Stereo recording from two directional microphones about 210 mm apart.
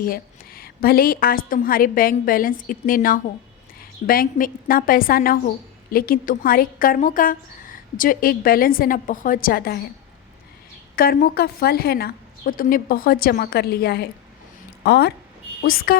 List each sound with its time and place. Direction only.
0.0 s speech: 45° left (ahead or behind)
10.9 s speech: 45° left (ahead or behind)